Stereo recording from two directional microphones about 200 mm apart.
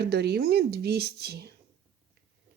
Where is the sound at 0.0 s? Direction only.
55° right (ahead or behind).